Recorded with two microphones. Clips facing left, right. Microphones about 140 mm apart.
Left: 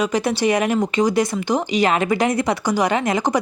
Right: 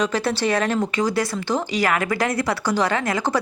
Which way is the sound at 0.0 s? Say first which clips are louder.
Left 2 dB; 15° left (ahead or behind).